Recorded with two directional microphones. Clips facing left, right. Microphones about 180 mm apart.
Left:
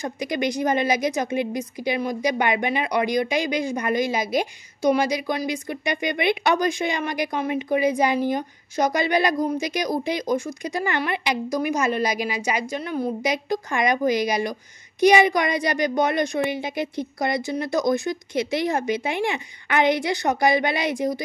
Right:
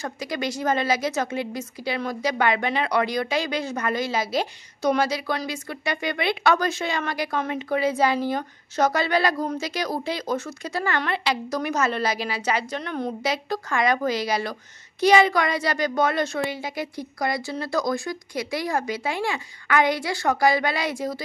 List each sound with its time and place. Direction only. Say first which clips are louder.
0.0 s a woman's voice: left 4 dB; 20° left (ahead or behind)